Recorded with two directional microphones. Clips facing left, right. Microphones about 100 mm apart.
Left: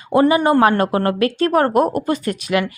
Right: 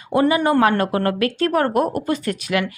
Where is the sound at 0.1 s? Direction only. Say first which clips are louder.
Left 3 dB; 30° left (ahead or behind).